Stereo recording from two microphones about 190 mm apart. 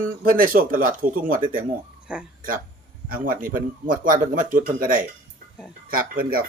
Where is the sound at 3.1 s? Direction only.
45° right (ahead or behind).